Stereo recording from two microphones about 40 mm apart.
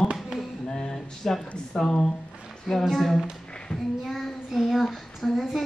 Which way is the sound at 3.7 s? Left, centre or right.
Left.